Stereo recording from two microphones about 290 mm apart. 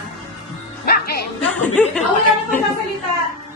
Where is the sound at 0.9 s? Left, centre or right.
Left.